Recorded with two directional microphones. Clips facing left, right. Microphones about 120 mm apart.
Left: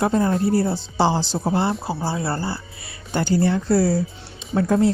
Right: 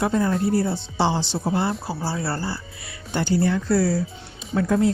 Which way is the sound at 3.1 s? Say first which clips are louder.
Left 2 dB; 45° left (ahead or behind).